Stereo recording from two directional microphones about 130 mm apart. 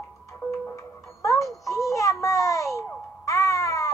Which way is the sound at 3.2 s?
25° left (ahead or behind).